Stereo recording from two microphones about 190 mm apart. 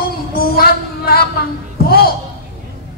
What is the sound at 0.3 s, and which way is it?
Female singing, 55° left (ahead or behind).